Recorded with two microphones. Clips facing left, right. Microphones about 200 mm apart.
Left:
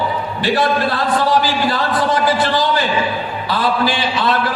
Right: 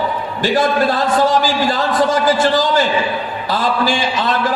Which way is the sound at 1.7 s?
45° right (ahead or behind).